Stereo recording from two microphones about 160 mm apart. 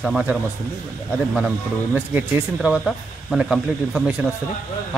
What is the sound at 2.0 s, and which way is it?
Speech, 10° right (ahead or behind).